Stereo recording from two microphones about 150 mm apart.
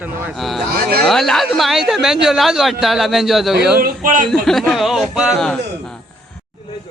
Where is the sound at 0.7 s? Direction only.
90° right.